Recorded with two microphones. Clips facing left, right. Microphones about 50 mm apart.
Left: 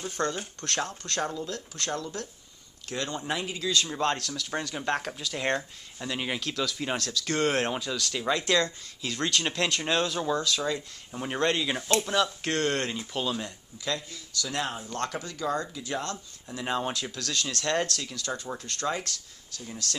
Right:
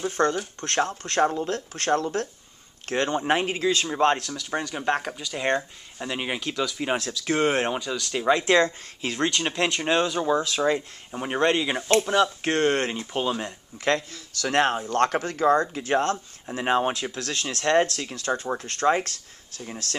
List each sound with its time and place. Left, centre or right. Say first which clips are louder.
0.0 s speech: right 7 dB; right
4.3 s speech: right 3 dB; centre
5.9 s speech: right 3 dB; right
8.1 s speech: right 6 dB; right
9.3 s speech: right 3 dB; centre; by 13.5 s right
13.8 s speech: right 8 dB; right